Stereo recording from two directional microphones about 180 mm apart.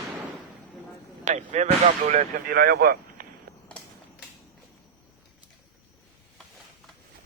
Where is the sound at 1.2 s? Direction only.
40° right (ahead or behind); by 3.3 s 60° right (ahead or behind).